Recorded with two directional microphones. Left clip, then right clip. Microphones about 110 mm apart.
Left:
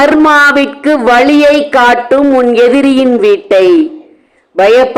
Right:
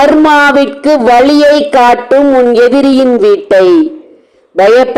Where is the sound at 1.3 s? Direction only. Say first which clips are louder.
Right 1 dB; 35° right (ahead or behind).